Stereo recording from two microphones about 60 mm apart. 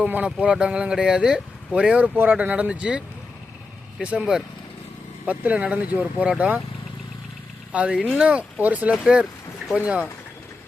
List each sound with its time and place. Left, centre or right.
0.0 s speech: right
2.1 s speech: right
4.0 s speech: centre
7.7 s speech: right